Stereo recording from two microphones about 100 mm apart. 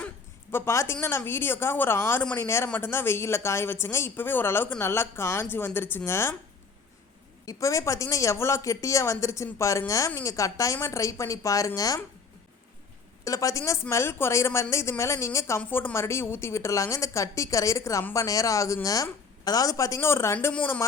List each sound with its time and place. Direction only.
0.5 s a woman's voice: 25° left (ahead or behind)
7.4 s speech: 30° left (ahead or behind)
13.2 s a woman's voice: 35° left (ahead or behind); by 20.8 s 20° left (ahead or behind)